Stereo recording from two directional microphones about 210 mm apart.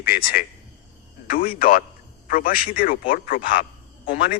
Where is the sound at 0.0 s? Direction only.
45° left (ahead or behind).